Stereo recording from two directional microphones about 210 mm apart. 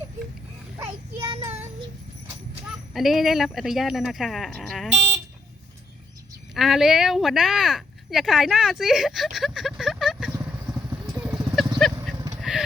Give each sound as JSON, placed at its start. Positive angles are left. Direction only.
{"t": 1.2, "sound": "child singing", "side_deg": -15}
{"t": 2.9, "sound": "speech", "side_deg": 0}
{"t": 6.5, "sound": "speech", "side_deg": 0}
{"t": 10.3, "sound": "vehicle", "side_deg": -15}
{"t": 11.1, "sound": "clip-clop", "side_deg": -5}
{"t": 12.4, "sound": "a sound", "side_deg": 0}